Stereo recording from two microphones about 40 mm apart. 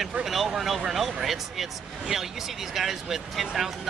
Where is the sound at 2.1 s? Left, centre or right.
Centre.